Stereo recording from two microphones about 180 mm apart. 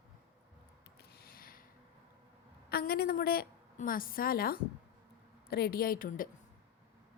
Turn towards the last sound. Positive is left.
turn(degrees=55)  # may be behind; listen again after turning